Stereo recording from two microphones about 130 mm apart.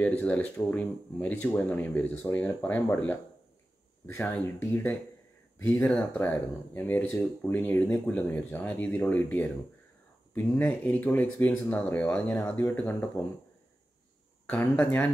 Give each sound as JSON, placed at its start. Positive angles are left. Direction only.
{"t": 0.0, "sound": "speech", "side_deg": 10}
{"t": 14.4, "sound": "speech", "side_deg": 10}